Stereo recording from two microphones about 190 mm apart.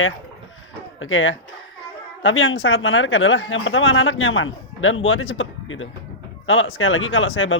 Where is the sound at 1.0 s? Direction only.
90° left.